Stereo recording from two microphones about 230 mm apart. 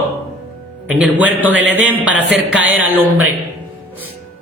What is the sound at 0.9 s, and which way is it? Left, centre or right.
A man's voice, centre.